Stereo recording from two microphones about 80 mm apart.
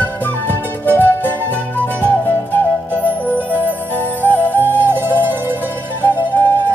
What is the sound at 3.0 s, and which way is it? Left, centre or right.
Flute, left.